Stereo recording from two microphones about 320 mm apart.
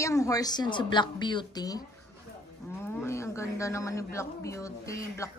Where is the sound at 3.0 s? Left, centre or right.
Centre.